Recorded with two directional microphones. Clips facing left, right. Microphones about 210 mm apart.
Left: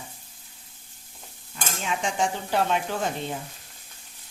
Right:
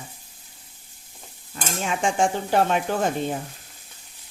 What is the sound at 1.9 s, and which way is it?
Stir, 50° right (ahead or behind).